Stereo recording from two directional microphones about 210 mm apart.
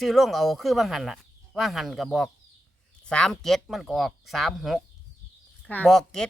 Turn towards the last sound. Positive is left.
turn(degrees=0)  # may be behind; listen again after turning